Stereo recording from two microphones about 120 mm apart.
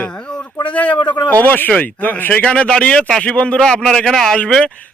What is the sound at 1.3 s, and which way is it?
Speech, 15° left (ahead or behind).